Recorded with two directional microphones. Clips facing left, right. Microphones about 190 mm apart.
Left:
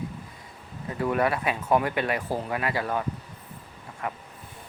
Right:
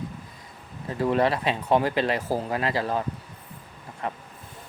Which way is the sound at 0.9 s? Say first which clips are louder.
Right 2 dB; 30° right (ahead or behind).